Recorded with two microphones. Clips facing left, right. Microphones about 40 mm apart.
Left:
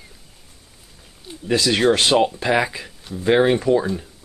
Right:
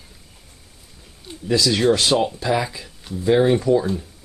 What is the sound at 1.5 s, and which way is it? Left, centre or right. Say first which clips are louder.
Speech: even; left.